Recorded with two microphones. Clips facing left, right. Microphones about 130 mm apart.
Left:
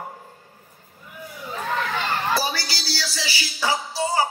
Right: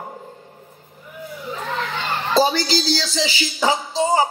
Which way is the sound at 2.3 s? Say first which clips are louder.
Right 9 dB; 20° right (ahead or behind).